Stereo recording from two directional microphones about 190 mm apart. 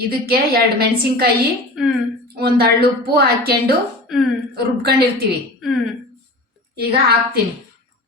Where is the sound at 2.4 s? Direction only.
55° right (ahead or behind).